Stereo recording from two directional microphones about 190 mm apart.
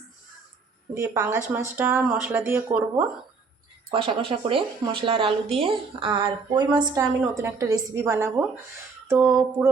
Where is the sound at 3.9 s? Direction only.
30° right (ahead or behind); by 9.7 s 10° right (ahead or behind).